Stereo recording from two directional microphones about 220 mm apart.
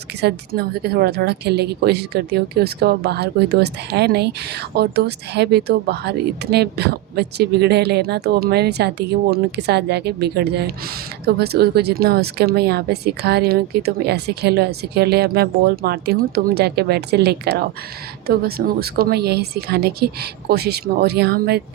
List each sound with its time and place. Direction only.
0.2 s a woman's voice: 45° right (ahead or behind)